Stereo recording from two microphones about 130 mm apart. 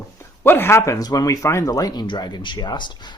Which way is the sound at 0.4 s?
15° left (ahead or behind).